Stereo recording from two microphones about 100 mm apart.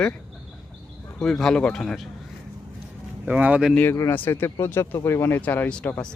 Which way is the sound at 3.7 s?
15° left (ahead or behind).